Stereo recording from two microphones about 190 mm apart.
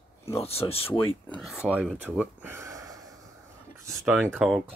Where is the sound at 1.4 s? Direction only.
5° right (ahead or behind).